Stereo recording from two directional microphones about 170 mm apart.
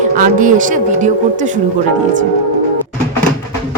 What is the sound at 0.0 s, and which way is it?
A woman's voice, 50° right (ahead or behind).